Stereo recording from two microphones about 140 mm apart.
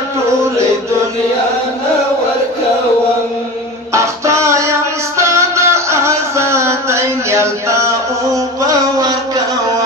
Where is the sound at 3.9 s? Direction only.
20° right (ahead or behind).